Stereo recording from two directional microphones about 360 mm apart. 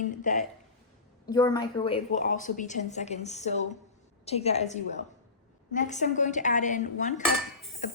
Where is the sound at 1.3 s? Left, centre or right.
Centre.